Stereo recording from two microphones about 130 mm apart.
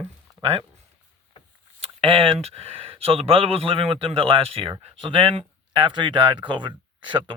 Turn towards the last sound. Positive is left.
turn(degrees=-40)  # may be behind; listen again after turning